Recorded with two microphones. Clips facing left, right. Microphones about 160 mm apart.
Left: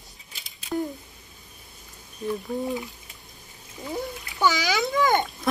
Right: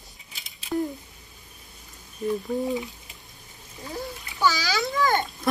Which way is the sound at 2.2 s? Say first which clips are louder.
Right 2 dB; centre (ahead or behind).